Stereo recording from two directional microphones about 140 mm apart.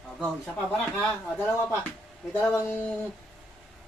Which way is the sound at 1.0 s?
15° left (ahead or behind).